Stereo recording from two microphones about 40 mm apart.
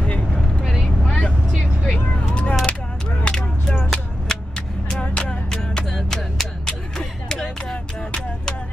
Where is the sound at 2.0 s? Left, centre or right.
Left.